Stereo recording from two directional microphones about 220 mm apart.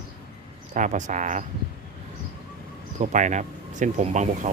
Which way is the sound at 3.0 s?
35° right (ahead or behind).